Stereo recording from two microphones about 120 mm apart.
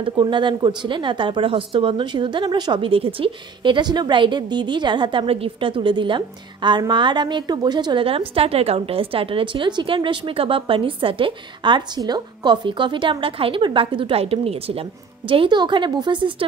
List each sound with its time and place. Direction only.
0.0 s speech: 40° right (ahead or behind)
8.4 s a woman's voice: 55° right (ahead or behind)